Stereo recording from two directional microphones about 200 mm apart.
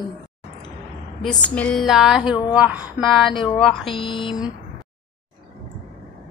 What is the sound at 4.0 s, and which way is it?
Speech, 25° left (ahead or behind).